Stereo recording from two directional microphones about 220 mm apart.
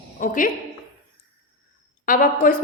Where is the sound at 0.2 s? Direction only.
40° left (ahead or behind).